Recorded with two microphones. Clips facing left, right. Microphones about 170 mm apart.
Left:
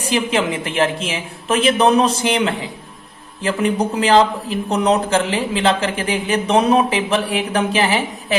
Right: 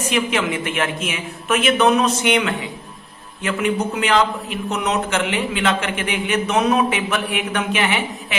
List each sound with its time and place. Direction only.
0.0 s a man's voice: 30° left (ahead or behind)